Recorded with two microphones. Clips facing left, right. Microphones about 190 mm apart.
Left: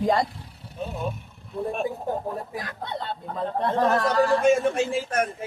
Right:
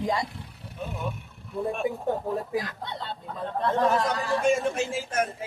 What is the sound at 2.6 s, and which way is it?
Speech, 50° left (ahead or behind).